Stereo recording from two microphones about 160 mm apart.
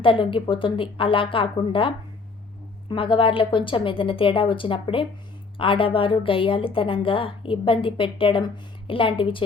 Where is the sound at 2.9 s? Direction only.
35° left (ahead or behind).